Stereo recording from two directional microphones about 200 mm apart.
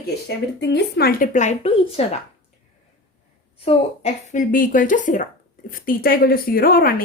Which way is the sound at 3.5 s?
30° left (ahead or behind).